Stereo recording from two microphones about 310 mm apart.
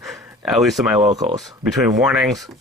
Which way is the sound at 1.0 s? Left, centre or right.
Right.